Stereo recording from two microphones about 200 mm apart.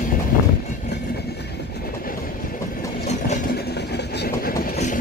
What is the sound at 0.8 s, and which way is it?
Train, 55° left (ahead or behind).